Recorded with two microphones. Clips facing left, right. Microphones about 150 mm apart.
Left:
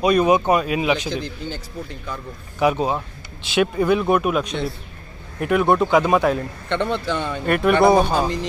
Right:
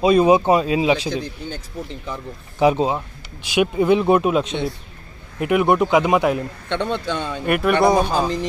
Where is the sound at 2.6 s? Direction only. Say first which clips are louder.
Right 3 dB; 30° right (ahead or behind).